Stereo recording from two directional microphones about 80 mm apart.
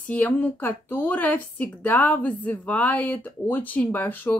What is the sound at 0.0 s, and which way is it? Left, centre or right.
A woman's voice, centre.